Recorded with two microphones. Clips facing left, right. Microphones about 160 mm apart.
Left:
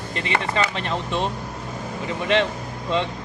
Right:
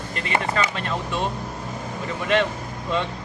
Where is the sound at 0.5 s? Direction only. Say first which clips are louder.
Left 1 dB; 25° left (ahead or behind).